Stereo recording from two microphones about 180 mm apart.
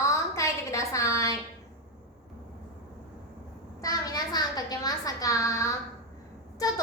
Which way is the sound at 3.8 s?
20° left (ahead or behind).